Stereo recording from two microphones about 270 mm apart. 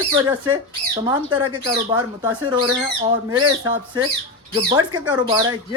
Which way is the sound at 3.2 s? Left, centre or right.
Centre.